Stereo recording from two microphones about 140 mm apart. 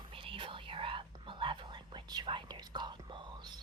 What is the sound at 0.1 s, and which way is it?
Whispering, 40° right (ahead or behind).